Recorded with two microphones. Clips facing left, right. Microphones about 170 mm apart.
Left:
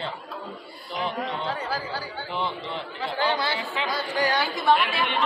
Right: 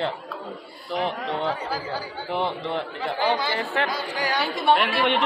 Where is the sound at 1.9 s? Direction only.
60° right (ahead or behind).